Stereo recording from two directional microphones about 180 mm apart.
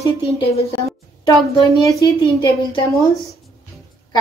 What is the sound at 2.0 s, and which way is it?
Speech, 25° left (ahead or behind).